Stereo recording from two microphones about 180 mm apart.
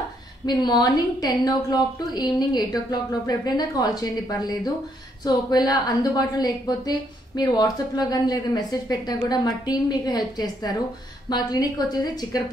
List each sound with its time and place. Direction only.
0.5 s a woman's voice: 25° left (ahead or behind)